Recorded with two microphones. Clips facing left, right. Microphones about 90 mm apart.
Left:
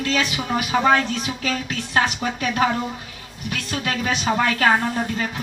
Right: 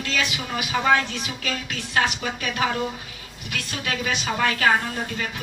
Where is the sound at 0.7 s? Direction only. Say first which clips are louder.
Left 2 dB; 30° left (ahead or behind).